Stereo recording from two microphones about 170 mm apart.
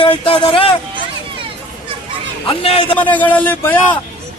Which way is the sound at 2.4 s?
35° left (ahead or behind).